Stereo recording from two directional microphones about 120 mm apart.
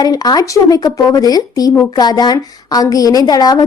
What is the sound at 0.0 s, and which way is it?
A woman's voice, 30° left (ahead or behind).